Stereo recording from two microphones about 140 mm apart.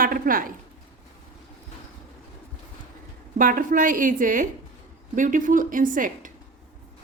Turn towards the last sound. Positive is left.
turn(degrees=-75)  # may be behind; listen again after turning